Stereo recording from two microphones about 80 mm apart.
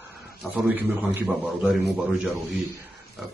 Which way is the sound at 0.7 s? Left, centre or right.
Right.